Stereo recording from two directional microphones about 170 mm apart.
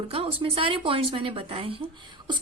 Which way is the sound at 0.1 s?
35° right (ahead or behind).